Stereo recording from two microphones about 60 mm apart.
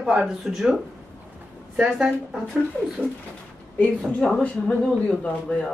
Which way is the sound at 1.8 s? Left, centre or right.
Centre.